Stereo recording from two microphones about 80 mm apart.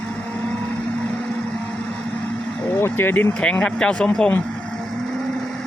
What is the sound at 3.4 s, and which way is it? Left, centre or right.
Speech, centre.